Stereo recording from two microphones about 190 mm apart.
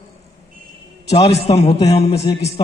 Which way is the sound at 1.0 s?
35° left (ahead or behind).